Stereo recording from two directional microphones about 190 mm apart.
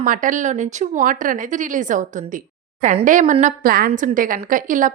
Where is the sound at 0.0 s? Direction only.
45° right (ahead or behind).